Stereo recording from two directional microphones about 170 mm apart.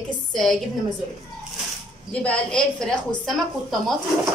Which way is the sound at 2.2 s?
5° left (ahead or behind).